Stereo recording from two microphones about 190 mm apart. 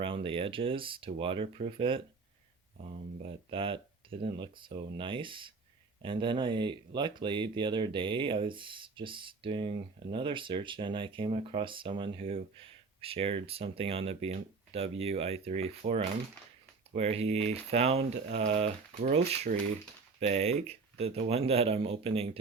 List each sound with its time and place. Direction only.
0.0 s speech: 30° right (ahead or behind)